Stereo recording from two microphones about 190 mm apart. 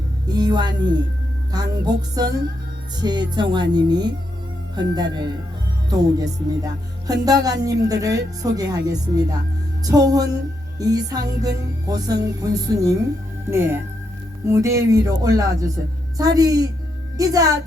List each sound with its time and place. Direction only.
0.3 s a woman's voice: 20° right (ahead or behind)
1.5 s music: 20° right (ahead or behind)
13.5 s speech: 15° right (ahead or behind)
16.1 s music: 20° right (ahead or behind)